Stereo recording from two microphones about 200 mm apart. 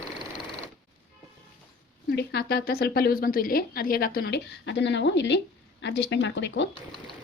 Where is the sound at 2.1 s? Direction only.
55° left (ahead or behind).